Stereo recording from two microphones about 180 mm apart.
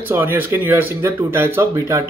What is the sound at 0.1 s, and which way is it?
Speech, 10° right (ahead or behind).